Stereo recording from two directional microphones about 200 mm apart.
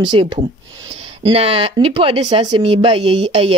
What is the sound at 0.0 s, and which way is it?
Speech, 25° right (ahead or behind).